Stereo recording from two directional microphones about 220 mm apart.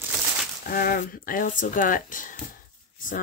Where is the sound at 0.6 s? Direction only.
40° left (ahead or behind).